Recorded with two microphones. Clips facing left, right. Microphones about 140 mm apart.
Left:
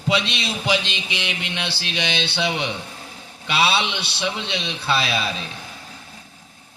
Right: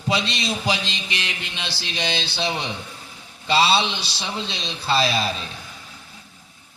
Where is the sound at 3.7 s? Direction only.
60° left (ahead or behind).